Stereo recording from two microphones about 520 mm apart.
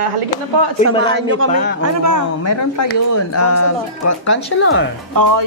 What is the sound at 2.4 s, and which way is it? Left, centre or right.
Speech, left.